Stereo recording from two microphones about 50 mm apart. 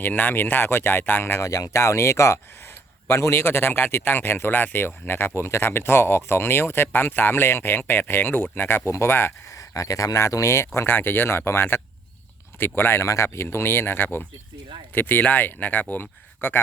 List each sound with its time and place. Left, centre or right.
0.0 s speech: left
9.6 s speech: left
10.8 s speech: left
12.5 s speech: left
13.0 s speech: left